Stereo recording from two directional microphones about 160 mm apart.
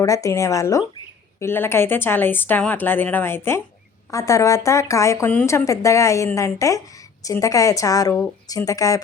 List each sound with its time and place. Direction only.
0.0 s a woman's voice: 20° left (ahead or behind)